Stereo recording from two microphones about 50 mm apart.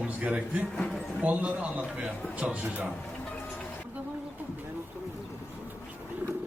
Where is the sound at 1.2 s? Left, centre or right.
Right.